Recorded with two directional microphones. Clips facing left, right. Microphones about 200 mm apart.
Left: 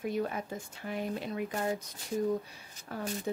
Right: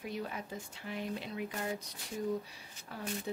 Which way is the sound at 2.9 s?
45° left (ahead or behind).